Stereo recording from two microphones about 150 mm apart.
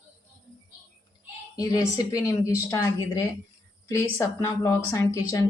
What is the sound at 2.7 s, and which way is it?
Speech, 20° left (ahead or behind).